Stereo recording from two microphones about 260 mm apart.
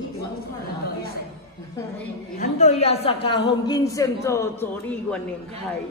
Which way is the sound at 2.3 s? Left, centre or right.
Left.